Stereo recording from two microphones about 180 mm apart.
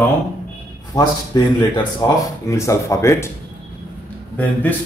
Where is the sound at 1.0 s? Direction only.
25° left (ahead or behind).